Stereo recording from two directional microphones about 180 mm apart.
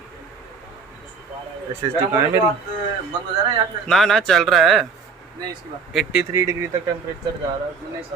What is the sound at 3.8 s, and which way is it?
Speech, centre (ahead or behind).